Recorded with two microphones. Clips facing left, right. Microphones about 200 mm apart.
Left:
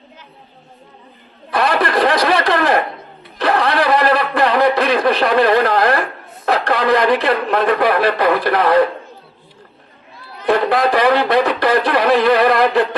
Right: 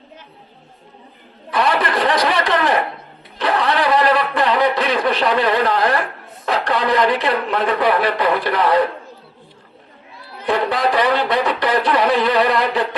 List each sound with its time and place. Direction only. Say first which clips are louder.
1.5 s a sound: left 2 dB; 40° left (ahead or behind)
6.4 s speech: left 3 dB; 45° left (ahead or behind)
10.7 s speech: left 3 dB; 40° left (ahead or behind)